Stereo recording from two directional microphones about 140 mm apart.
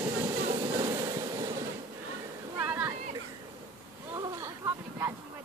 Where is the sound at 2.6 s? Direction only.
15° right (ahead or behind).